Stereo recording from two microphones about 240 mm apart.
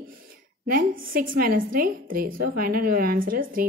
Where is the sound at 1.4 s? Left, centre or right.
Right.